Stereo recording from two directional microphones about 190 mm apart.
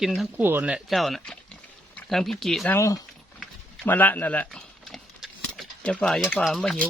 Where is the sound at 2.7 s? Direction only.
15° left (ahead or behind).